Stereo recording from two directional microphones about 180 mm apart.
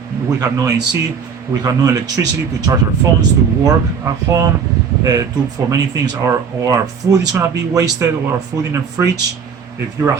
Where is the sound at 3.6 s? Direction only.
15° right (ahead or behind).